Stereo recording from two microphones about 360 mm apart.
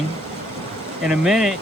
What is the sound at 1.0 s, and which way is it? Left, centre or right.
Speech, centre.